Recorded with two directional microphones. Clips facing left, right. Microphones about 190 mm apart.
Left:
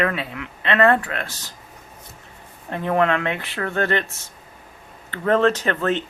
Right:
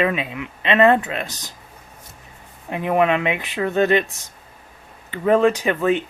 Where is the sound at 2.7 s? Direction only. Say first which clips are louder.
Right 2 dB; 15° right (ahead or behind).